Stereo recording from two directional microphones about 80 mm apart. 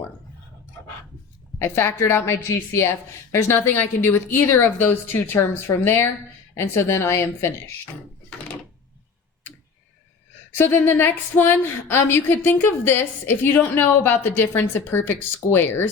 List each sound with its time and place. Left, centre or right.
1.5 s a woman's voice: left
10.6 s a woman's voice: left